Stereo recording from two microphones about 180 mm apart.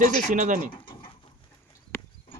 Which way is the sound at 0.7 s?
30° left (ahead or behind).